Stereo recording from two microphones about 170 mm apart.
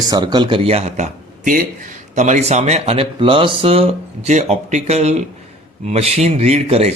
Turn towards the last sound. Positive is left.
turn(degrees=-35)  # may be behind; listen again after turning